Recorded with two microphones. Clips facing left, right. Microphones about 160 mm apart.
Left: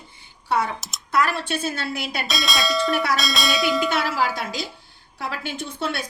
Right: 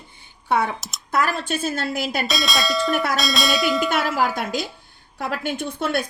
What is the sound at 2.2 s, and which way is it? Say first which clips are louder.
Speech: right 1 dB; centre (ahead or behind).